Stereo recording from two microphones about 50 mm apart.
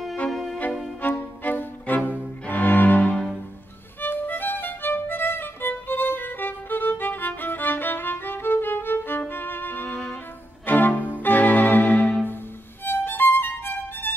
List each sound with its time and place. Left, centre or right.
0.3 s music: centre
1.0 s music: left
2.0 s cello: left
4.0 s violin: left
9.3 s music: left
12.8 s violin: left